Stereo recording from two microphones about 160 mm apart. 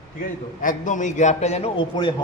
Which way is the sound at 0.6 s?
55° left (ahead or behind).